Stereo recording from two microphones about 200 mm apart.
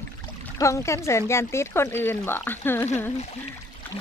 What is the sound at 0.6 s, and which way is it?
Speech, 15° left (ahead or behind).